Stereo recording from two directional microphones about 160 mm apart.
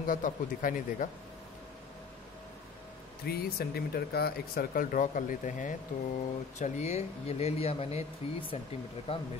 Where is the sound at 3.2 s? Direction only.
80° left.